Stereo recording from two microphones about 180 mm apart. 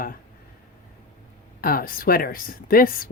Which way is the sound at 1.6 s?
55° left (ahead or behind).